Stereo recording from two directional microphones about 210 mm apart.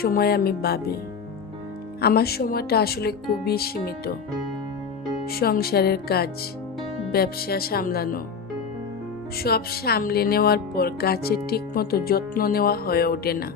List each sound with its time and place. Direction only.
0.0 s music: 45° left (ahead or behind)
2.0 s music: 50° left (ahead or behind)
5.2 s music: 45° left (ahead or behind)
9.4 s music: 45° left (ahead or behind)